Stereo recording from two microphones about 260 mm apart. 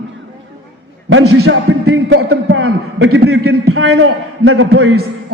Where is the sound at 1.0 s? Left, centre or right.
Right.